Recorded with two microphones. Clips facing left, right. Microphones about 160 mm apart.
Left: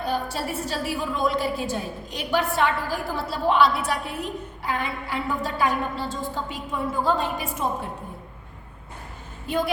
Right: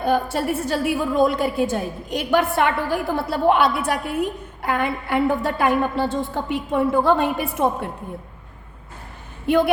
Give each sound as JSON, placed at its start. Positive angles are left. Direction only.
{"t": 0.0, "sound": "a woman's voice", "side_deg": -55}